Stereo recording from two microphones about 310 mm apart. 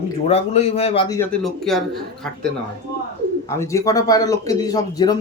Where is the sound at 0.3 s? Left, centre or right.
Centre.